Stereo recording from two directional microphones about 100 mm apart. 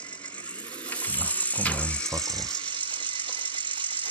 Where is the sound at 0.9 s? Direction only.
15° left (ahead or behind).